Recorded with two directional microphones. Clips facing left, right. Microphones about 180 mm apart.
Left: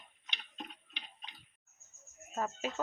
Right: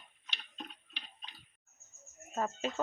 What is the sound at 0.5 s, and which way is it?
Tick-tock, 15° left (ahead or behind).